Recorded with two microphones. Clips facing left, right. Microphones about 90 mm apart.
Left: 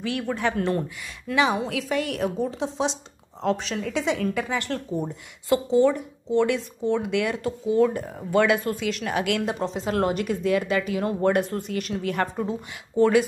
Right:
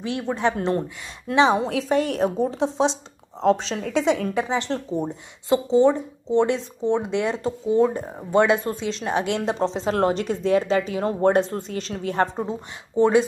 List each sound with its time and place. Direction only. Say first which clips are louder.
0.0 s a woman's voice: right 2 dB; 25° right (ahead or behind)